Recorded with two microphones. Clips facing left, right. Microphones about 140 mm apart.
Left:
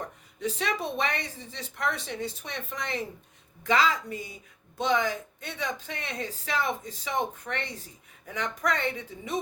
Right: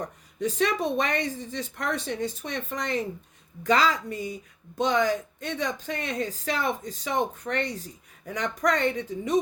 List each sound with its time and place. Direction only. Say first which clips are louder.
0.3 s speech: right 5 dB; 50° right (ahead or behind)